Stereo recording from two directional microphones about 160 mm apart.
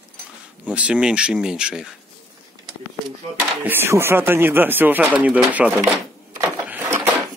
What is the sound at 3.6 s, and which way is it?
Speech, 15° right (ahead or behind).